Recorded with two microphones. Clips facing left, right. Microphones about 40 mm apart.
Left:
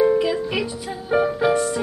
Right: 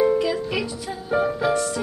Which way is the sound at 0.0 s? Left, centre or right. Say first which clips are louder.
Left 2 dB; centre.